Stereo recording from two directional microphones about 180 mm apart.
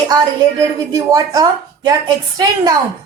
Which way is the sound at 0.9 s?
20° right (ahead or behind).